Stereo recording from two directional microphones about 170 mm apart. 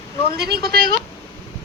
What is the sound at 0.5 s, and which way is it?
Speech, 65° right (ahead or behind).